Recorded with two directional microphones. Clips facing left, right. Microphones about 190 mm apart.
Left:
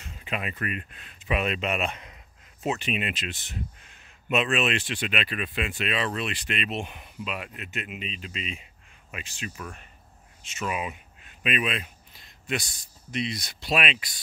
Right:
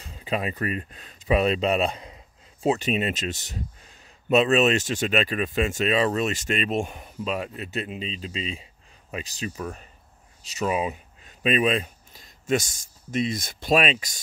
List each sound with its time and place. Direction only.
0.0 s speech: 35° right (ahead or behind)